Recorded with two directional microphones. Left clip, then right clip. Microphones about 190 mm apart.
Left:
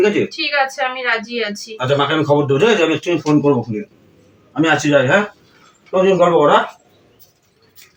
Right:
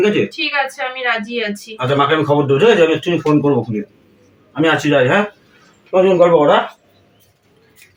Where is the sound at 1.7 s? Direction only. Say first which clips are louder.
Right 2 dB; 5° right (ahead or behind).